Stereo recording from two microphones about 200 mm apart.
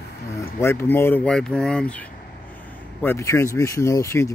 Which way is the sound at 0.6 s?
10° left (ahead or behind).